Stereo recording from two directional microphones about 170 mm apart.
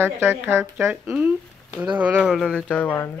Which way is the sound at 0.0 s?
15° right (ahead or behind).